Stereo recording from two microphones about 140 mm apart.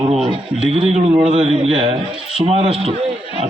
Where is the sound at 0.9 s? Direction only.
45° right (ahead or behind).